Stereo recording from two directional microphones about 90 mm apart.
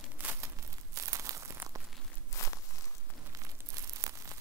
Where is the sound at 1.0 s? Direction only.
35° right (ahead or behind).